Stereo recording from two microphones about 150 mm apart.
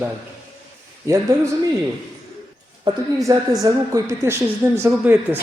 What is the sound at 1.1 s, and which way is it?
Speech, 20° right (ahead or behind).